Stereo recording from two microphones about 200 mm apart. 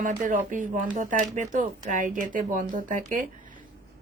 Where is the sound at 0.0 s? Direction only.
40° right (ahead or behind).